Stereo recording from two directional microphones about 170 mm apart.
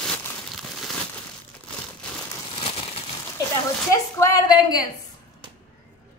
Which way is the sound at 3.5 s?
20° left (ahead or behind).